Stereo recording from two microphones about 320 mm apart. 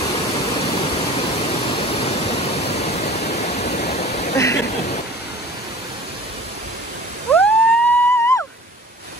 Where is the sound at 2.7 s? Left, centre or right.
Centre.